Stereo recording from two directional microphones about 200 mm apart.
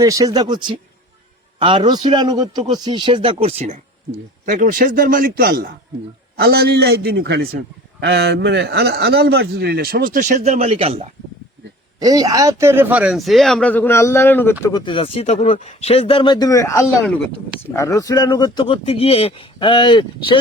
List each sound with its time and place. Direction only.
0.0 s speech: 15° right (ahead or behind)
4.4 s a man's voice: 40° right (ahead or behind)
11.9 s a man's voice: 20° right (ahead or behind); by 20.4 s 25° left (ahead or behind)